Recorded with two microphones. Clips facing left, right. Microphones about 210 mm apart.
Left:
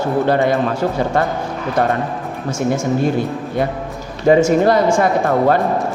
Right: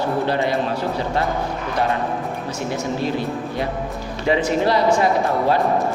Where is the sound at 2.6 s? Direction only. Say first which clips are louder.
Left 8 dB; 50° left (ahead or behind).